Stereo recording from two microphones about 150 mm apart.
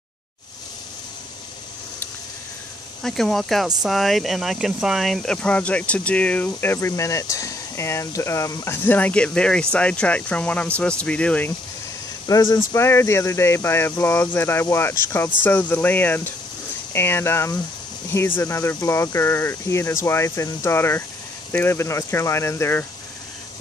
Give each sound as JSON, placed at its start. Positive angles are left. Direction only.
{"t": 3.0, "sound": "speech", "side_deg": 0}
{"t": 12.3, "sound": "speech", "side_deg": 20}